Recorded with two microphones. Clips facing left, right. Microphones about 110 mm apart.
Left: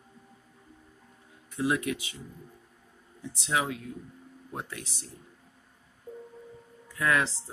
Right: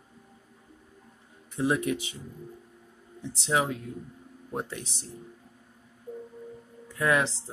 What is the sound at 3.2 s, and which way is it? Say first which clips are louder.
Speech: right 3 dB; 30° right (ahead or behind).